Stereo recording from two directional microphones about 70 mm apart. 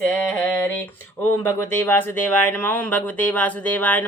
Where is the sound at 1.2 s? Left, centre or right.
Left.